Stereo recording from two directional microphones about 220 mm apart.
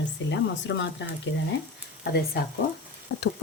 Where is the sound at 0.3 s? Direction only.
55° left (ahead or behind).